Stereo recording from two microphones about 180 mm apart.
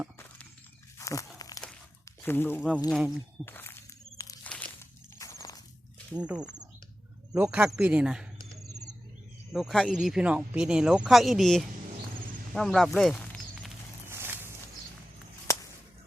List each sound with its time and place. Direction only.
0.9 s a sound: 15° left (ahead or behind)
1.4 s crumpling: 20° left (ahead or behind)
2.2 s speech: 10° left (ahead or behind)
2.6 s speech: 5° right (ahead or behind)
3.4 s walk: 10° left (ahead or behind)
5.2 s a sound: 15° left (ahead or behind)
6.1 s speech: 5° right (ahead or behind)
7.4 s speech: 5° right (ahead or behind)
9.5 s speech: centre (ahead or behind)
14.1 s a sound: 15° right (ahead or behind)